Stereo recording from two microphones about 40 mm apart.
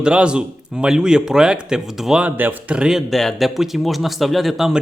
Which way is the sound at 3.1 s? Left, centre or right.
Centre.